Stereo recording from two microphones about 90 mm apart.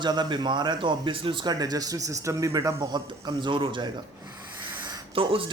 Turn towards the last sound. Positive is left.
turn(degrees=-90)